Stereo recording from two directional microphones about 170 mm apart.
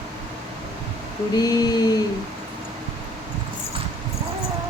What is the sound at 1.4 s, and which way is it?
Mantra, 20° left (ahead or behind).